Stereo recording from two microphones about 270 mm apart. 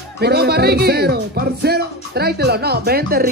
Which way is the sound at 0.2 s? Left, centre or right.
Right.